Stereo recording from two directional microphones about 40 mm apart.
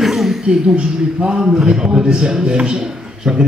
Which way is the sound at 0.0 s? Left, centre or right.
Centre.